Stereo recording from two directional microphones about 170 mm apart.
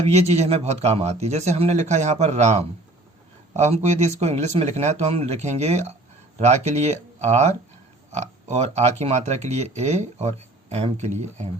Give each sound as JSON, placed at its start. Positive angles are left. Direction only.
{"t": 0.0, "sound": "speech", "side_deg": -40}